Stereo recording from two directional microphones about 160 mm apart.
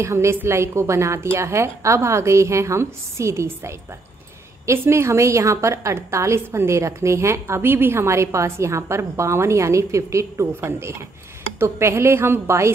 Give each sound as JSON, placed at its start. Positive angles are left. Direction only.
{"t": 0.0, "sound": "a woman's voice", "side_deg": -15}